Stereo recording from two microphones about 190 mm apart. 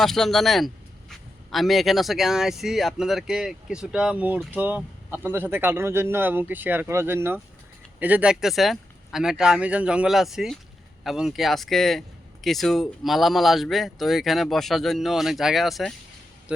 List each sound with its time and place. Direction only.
0.0 s speech: centre (ahead or behind)